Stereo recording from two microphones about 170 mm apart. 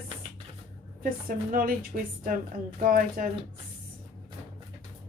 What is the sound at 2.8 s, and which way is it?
Speech, 55° right (ahead or behind).